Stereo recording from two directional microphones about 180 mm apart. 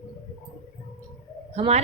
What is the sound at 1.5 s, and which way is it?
Speech, 35° right (ahead or behind).